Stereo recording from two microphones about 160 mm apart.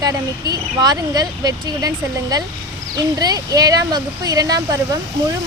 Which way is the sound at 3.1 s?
25° right (ahead or behind).